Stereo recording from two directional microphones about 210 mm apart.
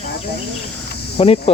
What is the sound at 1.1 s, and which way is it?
Speech, 30° left (ahead or behind).